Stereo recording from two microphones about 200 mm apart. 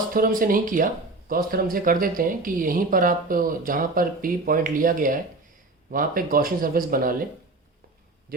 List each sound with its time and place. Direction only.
0.1 s speech: 45° right (ahead or behind)